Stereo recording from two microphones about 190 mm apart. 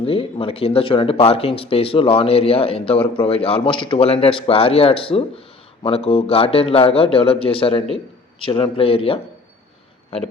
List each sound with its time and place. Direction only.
0.0 s speech: 30° left (ahead or behind)